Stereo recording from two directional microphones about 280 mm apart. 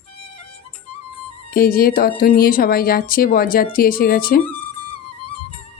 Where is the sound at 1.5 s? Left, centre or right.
Left.